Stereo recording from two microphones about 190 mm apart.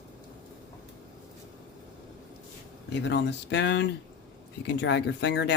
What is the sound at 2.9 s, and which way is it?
Speech, 65° left (ahead or behind).